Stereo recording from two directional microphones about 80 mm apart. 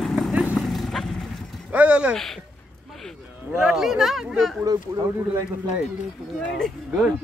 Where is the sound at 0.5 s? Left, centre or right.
Centre.